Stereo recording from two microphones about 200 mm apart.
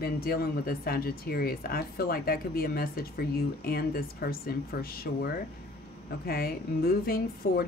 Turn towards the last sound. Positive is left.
turn(degrees=50)  # may be behind; listen again after turning